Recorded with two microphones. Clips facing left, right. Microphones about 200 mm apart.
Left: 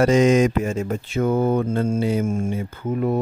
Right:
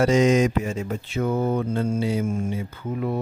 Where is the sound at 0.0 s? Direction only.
55° left (ahead or behind).